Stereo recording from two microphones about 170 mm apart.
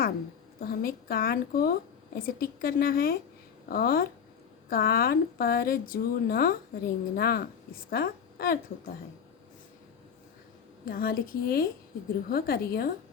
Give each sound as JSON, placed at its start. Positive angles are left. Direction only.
{"t": 0.6, "sound": "a woman's voice", "side_deg": 60}
{"t": 10.8, "sound": "a woman's voice", "side_deg": 60}